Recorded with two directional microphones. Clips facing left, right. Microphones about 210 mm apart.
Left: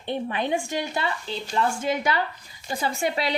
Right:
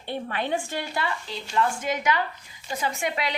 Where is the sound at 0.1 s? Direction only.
20° left (ahead or behind).